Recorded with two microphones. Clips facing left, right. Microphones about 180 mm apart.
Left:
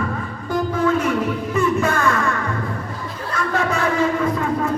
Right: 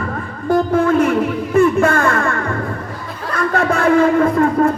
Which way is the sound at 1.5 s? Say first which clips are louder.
Right 7 dB; 55° right (ahead or behind).